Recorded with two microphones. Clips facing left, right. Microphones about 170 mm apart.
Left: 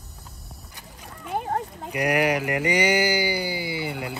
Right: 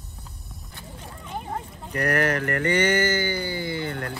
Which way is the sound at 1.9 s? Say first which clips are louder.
Left 1 dB; 10° left (ahead or behind).